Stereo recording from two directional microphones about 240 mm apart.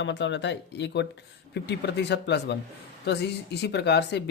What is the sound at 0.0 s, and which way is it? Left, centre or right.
Speech, left.